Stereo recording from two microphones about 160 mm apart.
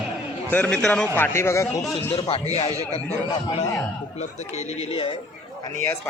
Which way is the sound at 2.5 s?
40° left (ahead or behind).